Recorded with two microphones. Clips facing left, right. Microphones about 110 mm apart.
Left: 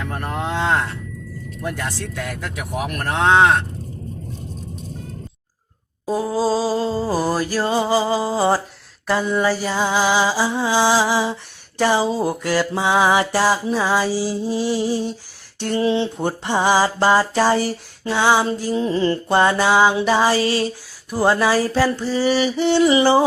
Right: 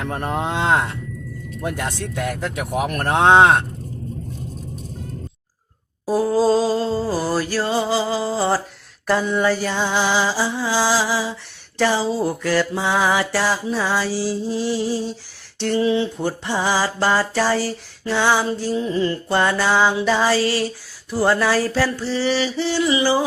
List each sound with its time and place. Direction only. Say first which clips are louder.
0.1 s speech: right 2 dB; 25° right (ahead or behind)
6.1 s music: right 3 dB; centre (ahead or behind); by 8.6 s 15° left (ahead or behind)
9.0 s music: even; centre (ahead or behind); by 18.9 s 20° left (ahead or behind)
18.9 s mantra: left 2 dB; 30° left (ahead or behind)
19.4 s music: left 2 dB; 15° left (ahead or behind)
22.8 s mantra: left 4 dB; 30° left (ahead or behind)